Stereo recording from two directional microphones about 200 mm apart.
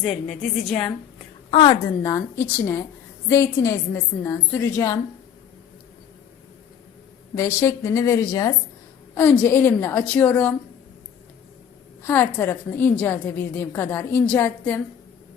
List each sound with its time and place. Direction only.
0.0 s a woman's voice: 5° left (ahead or behind)
1.5 s a woman's voice: 25° left (ahead or behind)
7.3 s a woman's voice: 15° left (ahead or behind)
12.0 s a woman's voice: 10° left (ahead or behind)